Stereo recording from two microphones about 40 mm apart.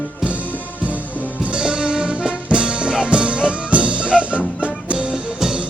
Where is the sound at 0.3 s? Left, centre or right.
Left.